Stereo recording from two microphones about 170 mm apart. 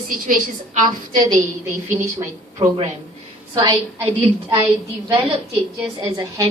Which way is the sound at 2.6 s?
40° right (ahead or behind).